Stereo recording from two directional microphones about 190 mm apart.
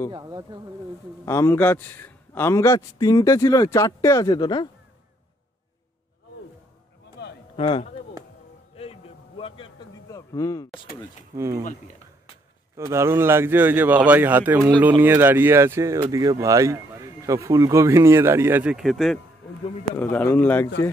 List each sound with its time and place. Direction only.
0.1 s speech: 20° right (ahead or behind)
1.2 s a man's voice: 15° left (ahead or behind)
7.2 s a sound: 60° left (ahead or behind)
7.5 s speech: 30° left (ahead or behind)
8.7 s a sound: 30° left (ahead or behind)
10.1 s speech: 15° left (ahead or behind)
11.3 s speech: 15° right (ahead or behind)
12.7 s a man's voice: 15° right (ahead or behind); by 20.7 s 10° left (ahead or behind)